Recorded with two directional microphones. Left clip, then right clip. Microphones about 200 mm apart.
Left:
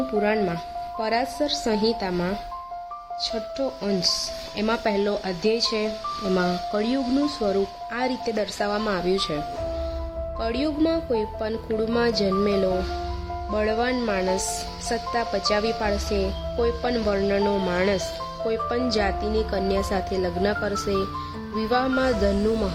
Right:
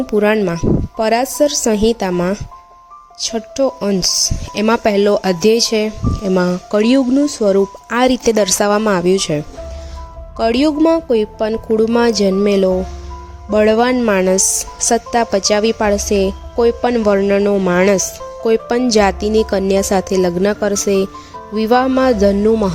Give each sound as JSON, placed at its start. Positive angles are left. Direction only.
{"t": 0.2, "sound": "speech", "side_deg": -45}